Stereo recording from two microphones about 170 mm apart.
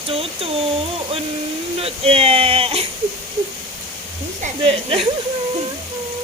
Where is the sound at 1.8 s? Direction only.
35° right (ahead or behind).